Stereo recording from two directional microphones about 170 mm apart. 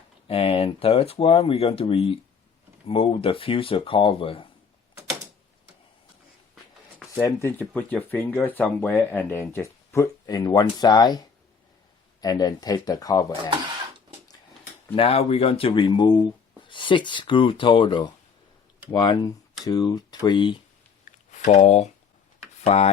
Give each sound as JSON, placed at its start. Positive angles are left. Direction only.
{"t": 0.3, "sound": "speech", "side_deg": 35}
{"t": 7.2, "sound": "speech", "side_deg": 15}
{"t": 14.9, "sound": "speech", "side_deg": 35}
{"t": 21.0, "sound": "a sound", "side_deg": 45}
{"t": 22.6, "sound": "speech", "side_deg": 40}